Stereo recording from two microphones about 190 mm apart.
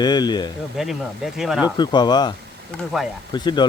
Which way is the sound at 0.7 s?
Centre (ahead or behind).